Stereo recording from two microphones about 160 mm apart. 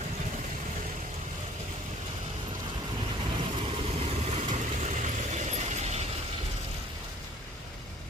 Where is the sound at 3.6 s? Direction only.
35° right (ahead or behind).